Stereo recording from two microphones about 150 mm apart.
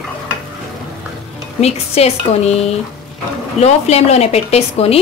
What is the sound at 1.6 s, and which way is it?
Speech, 45° left (ahead or behind).